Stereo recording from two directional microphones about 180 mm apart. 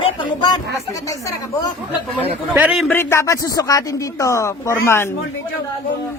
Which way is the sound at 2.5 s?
5° right (ahead or behind).